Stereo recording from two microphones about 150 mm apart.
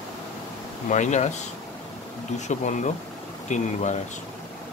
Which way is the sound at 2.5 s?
55° left (ahead or behind).